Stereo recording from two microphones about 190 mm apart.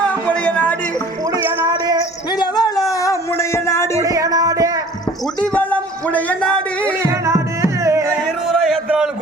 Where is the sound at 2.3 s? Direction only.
20° left (ahead or behind).